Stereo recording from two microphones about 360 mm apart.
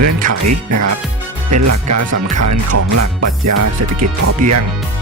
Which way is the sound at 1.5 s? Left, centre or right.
Right.